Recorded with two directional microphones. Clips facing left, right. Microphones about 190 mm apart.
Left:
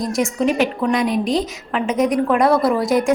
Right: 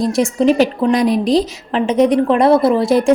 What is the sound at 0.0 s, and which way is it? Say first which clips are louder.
A woman's voice: right 5 dB; 30° right (ahead or behind).